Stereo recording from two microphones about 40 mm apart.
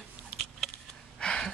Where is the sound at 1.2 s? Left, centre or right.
Left.